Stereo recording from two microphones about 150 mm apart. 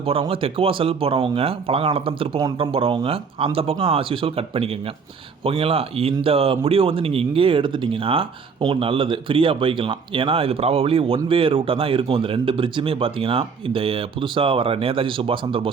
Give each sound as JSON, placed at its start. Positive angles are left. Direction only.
{"t": 0.1, "sound": "speech", "side_deg": -40}